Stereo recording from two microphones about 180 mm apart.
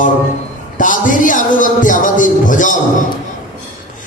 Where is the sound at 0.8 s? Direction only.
45° left (ahead or behind).